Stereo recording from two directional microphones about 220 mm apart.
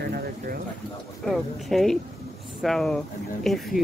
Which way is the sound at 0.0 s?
45° right (ahead or behind).